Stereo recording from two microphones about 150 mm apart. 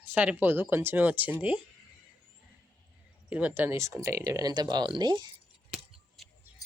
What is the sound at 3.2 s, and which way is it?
Speech, 10° right (ahead or behind).